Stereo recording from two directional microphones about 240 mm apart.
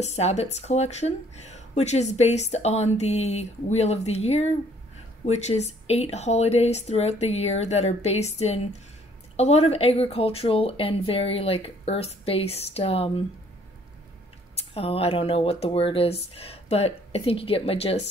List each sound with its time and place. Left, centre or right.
0.0 s speech: left
14.6 s speech: left